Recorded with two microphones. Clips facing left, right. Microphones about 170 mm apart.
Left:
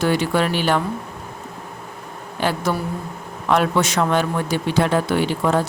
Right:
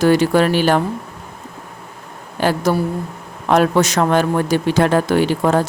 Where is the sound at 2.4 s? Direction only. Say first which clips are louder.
Right 5 dB; 40° right (ahead or behind).